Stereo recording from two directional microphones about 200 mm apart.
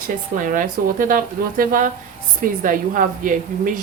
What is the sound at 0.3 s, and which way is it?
A woman's voice, 40° right (ahead or behind).